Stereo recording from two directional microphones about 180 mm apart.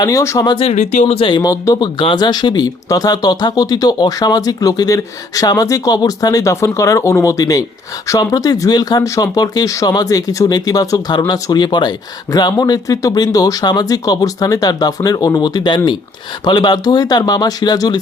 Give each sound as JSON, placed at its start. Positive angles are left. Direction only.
{"t": 0.0, "sound": "speech", "side_deg": 20}
{"t": 1.4, "sound": "speech", "side_deg": 20}